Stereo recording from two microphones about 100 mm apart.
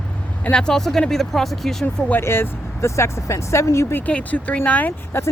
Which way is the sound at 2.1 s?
25° left (ahead or behind).